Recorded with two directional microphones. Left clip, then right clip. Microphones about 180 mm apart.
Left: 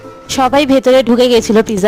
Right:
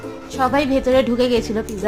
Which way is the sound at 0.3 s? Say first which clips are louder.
Left 8 dB; 60° left (ahead or behind).